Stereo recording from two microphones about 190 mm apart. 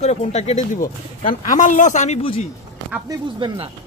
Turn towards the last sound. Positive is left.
turn(degrees=-25)  # may be behind; listen again after turning